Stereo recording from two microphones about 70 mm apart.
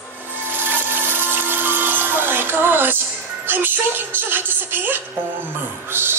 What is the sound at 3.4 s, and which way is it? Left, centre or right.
A woman's voice, right.